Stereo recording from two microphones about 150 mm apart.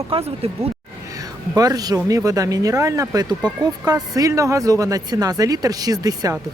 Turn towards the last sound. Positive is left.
turn(degrees=-25)  # may be behind; listen again after turning